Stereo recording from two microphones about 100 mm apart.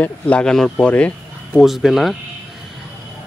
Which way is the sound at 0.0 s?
10° left (ahead or behind).